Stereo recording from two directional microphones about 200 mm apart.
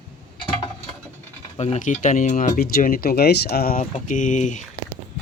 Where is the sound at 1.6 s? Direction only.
35° left (ahead or behind).